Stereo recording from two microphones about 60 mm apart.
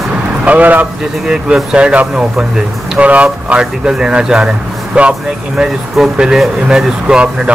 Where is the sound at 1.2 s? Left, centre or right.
Centre.